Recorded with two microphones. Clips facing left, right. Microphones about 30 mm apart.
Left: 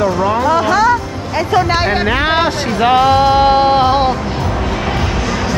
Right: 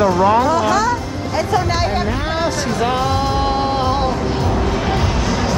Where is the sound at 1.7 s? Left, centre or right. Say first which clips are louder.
Left 4 dB; left.